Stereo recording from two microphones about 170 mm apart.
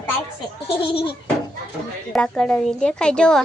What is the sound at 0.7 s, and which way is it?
Laughter, 30° left (ahead or behind).